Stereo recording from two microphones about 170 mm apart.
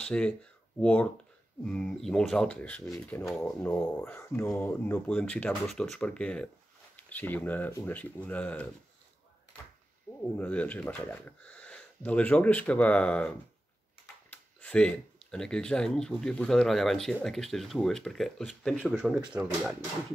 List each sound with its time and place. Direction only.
0.0 s speech: 5° left (ahead or behind)
10.3 s speech: 10° left (ahead or behind)
14.3 s speech: 10° left (ahead or behind)